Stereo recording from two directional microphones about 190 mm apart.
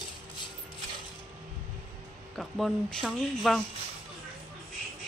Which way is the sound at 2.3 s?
Centre (ahead or behind).